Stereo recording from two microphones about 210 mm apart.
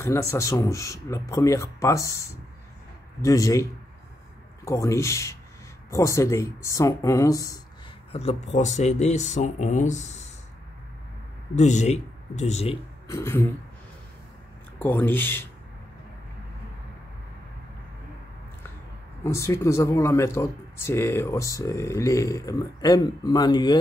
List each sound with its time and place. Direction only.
0.0 s speech: 15° left (ahead or behind)
4.6 s speech: 15° left (ahead or behind)
8.1 s speech: 30° left (ahead or behind)
11.5 s speech: 35° left (ahead or behind)
13.1 s speech: 15° left (ahead or behind)
14.8 s speech: 10° left (ahead or behind)
19.2 s speech: 15° left (ahead or behind)